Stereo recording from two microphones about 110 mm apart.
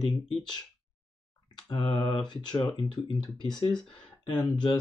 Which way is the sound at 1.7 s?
45° left (ahead or behind).